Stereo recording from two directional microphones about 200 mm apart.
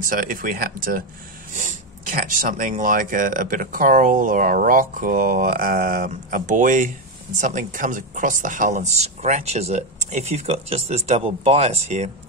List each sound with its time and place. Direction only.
0.0 s speech: 45° right (ahead or behind)